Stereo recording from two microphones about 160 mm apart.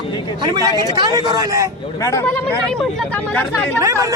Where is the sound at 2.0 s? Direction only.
20° left (ahead or behind).